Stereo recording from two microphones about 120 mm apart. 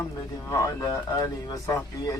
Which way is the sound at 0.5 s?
30° left (ahead or behind).